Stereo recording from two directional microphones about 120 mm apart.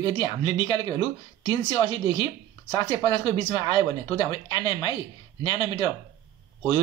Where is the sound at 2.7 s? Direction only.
45° left (ahead or behind).